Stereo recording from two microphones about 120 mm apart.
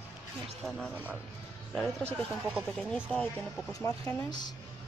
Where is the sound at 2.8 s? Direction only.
5° left (ahead or behind).